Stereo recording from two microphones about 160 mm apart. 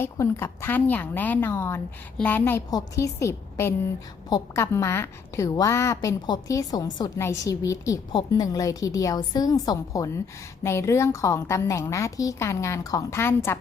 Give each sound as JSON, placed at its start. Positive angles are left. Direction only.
{"t": 0.0, "sound": "a woman's voice", "side_deg": 15}